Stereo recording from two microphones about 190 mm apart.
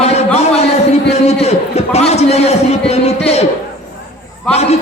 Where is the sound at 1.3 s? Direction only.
35° left (ahead or behind).